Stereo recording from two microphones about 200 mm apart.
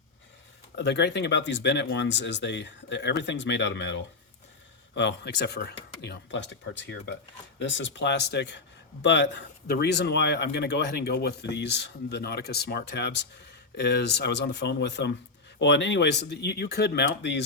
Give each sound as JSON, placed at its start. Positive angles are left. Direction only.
{"t": 0.8, "sound": "speech", "side_deg": 60}